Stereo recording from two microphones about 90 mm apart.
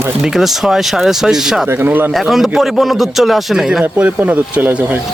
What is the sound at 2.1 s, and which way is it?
Speech, centre (ahead or behind).